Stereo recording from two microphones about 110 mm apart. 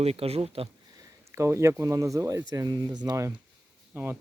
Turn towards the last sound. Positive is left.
turn(degrees=-15)  # may be behind; listen again after turning